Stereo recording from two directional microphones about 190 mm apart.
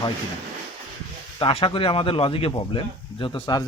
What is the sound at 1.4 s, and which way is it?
Speech, 30° left (ahead or behind).